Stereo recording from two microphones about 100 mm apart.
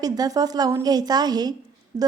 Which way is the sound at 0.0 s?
40° right (ahead or behind).